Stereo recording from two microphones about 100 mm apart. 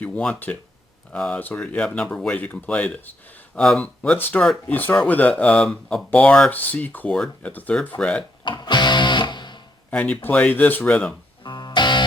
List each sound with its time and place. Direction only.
0.0 s speech: 15° left (ahead or behind)
6.1 s speech: 15° left (ahead or behind)
8.4 s music: 50° left (ahead or behind)
9.9 s speech: 15° left (ahead or behind)
11.4 s music: 50° left (ahead or behind)